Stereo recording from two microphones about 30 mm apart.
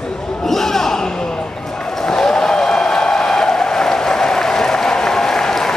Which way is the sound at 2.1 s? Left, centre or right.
Left.